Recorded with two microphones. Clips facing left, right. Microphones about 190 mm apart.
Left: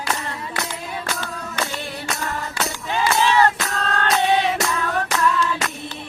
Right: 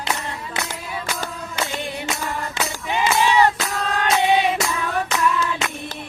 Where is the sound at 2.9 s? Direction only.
15° right (ahead or behind).